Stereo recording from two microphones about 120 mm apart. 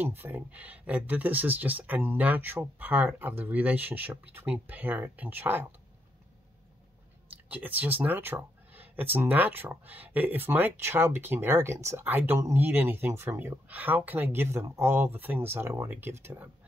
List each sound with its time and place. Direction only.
0.0 s speech: 15° right (ahead or behind)
7.4 s speech: 15° right (ahead or behind)